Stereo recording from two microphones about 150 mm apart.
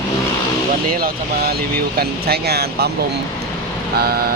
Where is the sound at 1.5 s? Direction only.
90° right.